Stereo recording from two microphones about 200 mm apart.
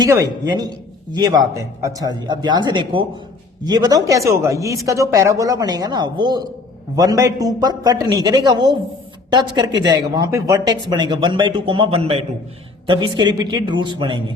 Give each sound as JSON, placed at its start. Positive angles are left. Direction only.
{"t": 0.0, "sound": "a man's voice", "side_deg": -20}